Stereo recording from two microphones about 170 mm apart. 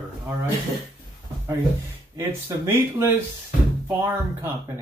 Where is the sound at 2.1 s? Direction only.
20° right (ahead or behind).